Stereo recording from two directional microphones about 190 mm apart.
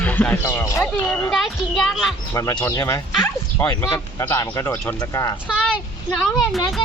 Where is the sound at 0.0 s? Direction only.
10° left (ahead or behind).